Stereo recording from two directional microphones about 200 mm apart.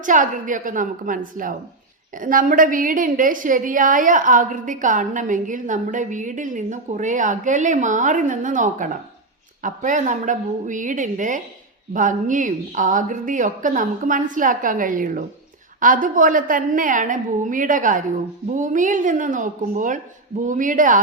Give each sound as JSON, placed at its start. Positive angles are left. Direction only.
{"t": 0.0, "sound": "a woman's voice", "side_deg": -40}